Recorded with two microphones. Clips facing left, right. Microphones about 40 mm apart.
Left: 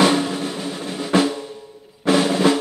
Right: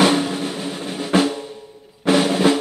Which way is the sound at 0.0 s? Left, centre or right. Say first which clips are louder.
Even; centre.